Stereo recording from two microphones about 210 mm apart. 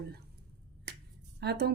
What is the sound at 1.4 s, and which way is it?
Speech, 50° right (ahead or behind).